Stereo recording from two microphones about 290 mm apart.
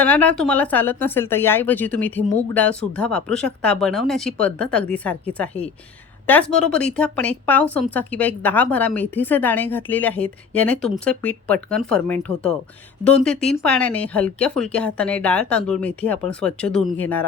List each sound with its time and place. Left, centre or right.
0.0 s speech: centre